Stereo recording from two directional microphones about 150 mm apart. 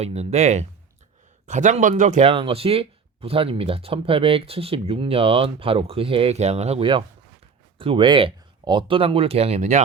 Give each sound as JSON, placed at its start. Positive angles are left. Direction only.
{"t": 0.0, "sound": "speech", "side_deg": -45}
{"t": 2.3, "sound": "speech", "side_deg": -40}